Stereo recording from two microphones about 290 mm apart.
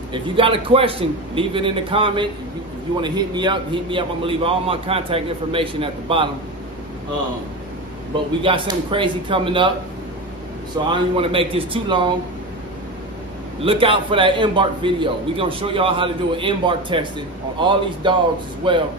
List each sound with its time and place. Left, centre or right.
0.1 s a man's voice: centre
8.4 s a man's voice: centre
10.9 s a man's voice: centre
13.7 s a man's voice: centre